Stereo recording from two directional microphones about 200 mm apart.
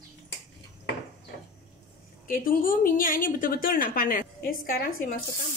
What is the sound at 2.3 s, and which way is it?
A woman's voice, 45° left (ahead or behind).